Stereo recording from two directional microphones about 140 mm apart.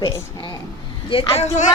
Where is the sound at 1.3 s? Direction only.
55° left (ahead or behind).